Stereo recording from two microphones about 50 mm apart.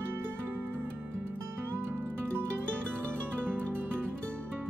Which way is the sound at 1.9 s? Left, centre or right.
Right.